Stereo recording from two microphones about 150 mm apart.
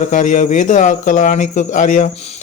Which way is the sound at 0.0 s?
55° left (ahead or behind).